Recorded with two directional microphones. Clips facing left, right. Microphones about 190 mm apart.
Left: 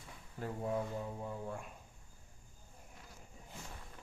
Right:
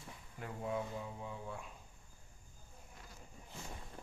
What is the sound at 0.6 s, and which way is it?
Speech, 35° left (ahead or behind).